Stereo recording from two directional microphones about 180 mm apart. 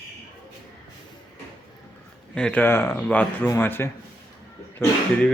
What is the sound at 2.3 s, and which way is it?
Speech, 5° left (ahead or behind).